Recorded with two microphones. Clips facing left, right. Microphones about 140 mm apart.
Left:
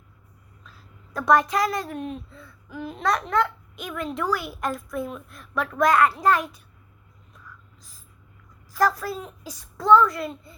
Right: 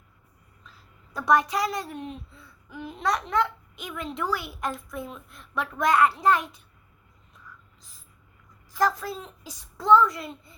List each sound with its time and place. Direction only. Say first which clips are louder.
1.2 s a woman's voice: left 3 dB; 15° right (ahead or behind)
2.0 s a sound: left 4 dB; 15° right (ahead or behind)
3.0 s a woman's voice: left 2 dB; 15° right (ahead or behind)
8.7 s a woman's voice: left 2 dB; 20° right (ahead or behind)